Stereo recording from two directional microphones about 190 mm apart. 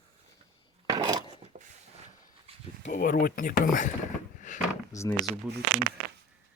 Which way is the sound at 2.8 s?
45° left (ahead or behind).